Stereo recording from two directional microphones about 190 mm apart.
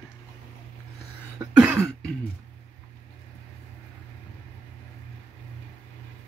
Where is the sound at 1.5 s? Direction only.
10° right (ahead or behind).